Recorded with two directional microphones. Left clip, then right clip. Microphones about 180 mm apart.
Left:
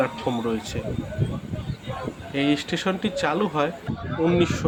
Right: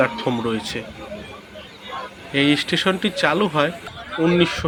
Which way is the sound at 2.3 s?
15° right (ahead or behind).